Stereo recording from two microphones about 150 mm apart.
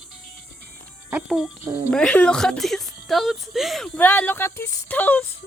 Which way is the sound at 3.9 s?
10° left (ahead or behind).